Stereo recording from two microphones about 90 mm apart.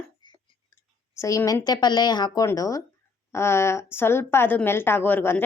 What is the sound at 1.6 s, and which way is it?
A woman's voice, 50° left (ahead or behind).